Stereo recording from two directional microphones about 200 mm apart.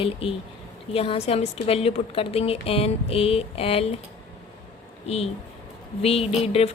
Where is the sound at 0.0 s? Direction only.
30° left (ahead or behind).